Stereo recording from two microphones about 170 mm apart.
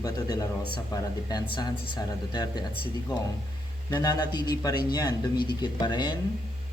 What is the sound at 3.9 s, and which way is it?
Speech, 25° left (ahead or behind).